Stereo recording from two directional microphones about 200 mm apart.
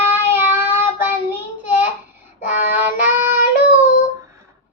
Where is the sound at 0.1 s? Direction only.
10° right (ahead or behind).